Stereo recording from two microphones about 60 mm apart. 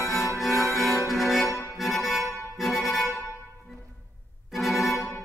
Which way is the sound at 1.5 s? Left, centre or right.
Left.